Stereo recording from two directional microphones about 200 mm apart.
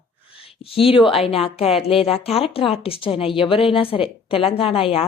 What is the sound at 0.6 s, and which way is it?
Speech, 30° left (ahead or behind).